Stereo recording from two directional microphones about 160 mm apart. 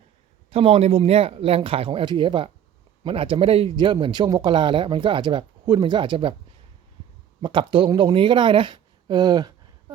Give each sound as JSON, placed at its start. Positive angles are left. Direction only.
{"t": 0.5, "sound": "speech", "side_deg": -35}
{"t": 7.4, "sound": "speech", "side_deg": -30}